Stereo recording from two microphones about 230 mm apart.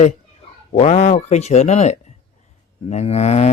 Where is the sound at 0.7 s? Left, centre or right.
Left.